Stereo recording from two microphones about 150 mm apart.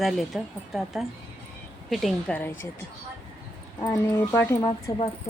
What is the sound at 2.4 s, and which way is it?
Speech, 15° left (ahead or behind).